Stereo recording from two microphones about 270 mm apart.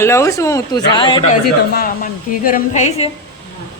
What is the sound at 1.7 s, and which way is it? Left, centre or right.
A woman's voice, left.